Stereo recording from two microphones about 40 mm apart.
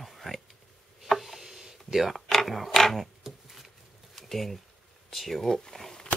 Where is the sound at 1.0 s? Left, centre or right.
Centre.